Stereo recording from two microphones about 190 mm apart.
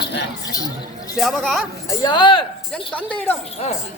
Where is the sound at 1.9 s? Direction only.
25° left (ahead or behind).